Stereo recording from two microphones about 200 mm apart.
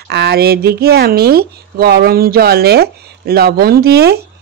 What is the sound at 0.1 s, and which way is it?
Speech, 55° right (ahead or behind).